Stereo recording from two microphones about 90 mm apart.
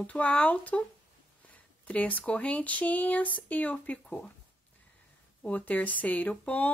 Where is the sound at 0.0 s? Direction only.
15° left (ahead or behind).